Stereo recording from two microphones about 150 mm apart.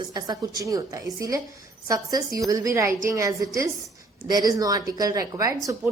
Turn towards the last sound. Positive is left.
turn(degrees=-25)  # may be behind; listen again after turning